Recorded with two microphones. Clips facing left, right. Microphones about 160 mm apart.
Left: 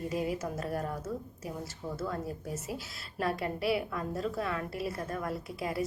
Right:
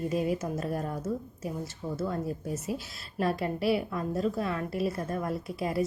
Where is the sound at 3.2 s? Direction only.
25° right (ahead or behind).